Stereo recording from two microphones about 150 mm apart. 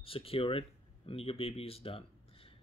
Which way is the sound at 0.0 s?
40° left (ahead or behind).